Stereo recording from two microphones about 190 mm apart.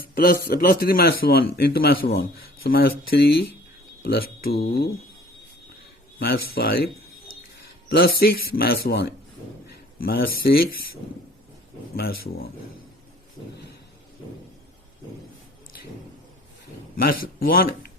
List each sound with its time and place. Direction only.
0.0 s a man's voice: 50° left (ahead or behind)
6.1 s a man's voice: 55° left (ahead or behind)
11.9 s a man's voice: 55° left (ahead or behind)
17.0 s a man's voice: 50° left (ahead or behind)